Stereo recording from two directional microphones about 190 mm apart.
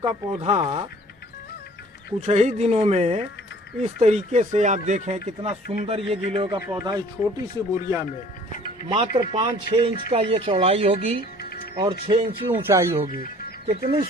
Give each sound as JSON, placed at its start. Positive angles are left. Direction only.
{"t": 0.0, "sound": "speech", "side_deg": -30}
{"t": 2.2, "sound": "speech", "side_deg": -35}
{"t": 6.7, "sound": "speech", "side_deg": -15}
{"t": 7.2, "sound": "speech", "side_deg": 40}
{"t": 8.9, "sound": "speech", "side_deg": -30}
{"t": 12.5, "sound": "speech", "side_deg": -10}
{"t": 13.7, "sound": "speech", "side_deg": -30}